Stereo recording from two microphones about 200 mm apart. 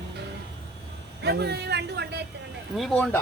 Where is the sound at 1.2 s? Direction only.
55° right (ahead or behind).